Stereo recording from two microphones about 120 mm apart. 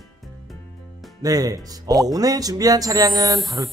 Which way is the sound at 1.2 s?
30° right (ahead or behind).